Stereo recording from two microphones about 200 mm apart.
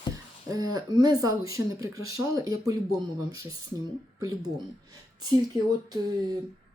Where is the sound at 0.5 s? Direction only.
20° right (ahead or behind).